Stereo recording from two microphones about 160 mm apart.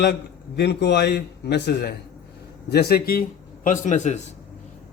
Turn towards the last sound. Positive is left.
turn(degrees=50)  # may be behind; listen again after turning